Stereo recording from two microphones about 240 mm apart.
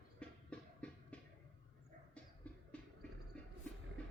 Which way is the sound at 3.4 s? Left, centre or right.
Centre.